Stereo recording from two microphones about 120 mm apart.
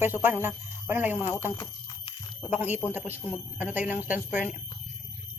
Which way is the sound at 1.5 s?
35° left (ahead or behind).